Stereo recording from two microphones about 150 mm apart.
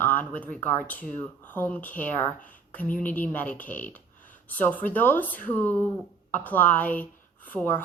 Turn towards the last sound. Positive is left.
turn(degrees=10)  # may be behind; listen again after turning